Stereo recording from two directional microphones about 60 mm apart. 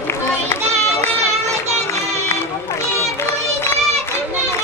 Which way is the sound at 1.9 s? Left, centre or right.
Left.